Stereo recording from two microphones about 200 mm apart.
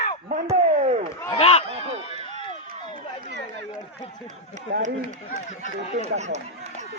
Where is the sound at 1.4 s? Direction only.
30° left (ahead or behind).